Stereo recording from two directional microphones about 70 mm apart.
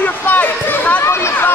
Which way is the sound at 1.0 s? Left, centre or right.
Left.